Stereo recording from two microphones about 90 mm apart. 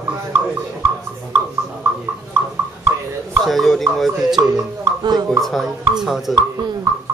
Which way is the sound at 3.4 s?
Centre (ahead or behind).